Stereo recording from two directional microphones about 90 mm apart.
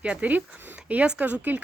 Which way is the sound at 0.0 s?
15° right (ahead or behind).